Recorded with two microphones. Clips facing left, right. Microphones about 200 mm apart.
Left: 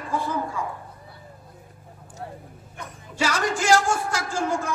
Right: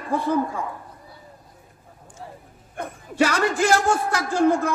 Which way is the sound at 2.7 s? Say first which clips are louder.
Right 8 dB; 55° right (ahead or behind).